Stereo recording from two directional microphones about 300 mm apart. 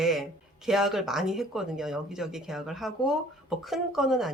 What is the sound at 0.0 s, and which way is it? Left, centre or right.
Speech, centre.